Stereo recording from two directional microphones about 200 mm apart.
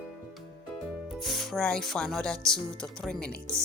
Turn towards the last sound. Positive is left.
turn(degrees=5)  # may be behind; listen again after turning